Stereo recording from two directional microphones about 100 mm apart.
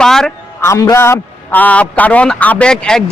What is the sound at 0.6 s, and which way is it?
A man's voice, 25° left (ahead or behind).